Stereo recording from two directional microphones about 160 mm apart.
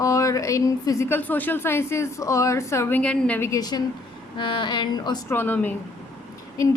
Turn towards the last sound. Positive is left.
turn(degrees=20)  # may be behind; listen again after turning